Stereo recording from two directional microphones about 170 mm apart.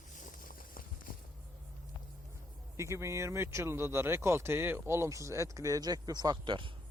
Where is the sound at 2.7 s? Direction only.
15° right (ahead or behind).